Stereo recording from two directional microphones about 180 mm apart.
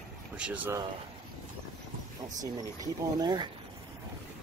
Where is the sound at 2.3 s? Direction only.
20° right (ahead or behind).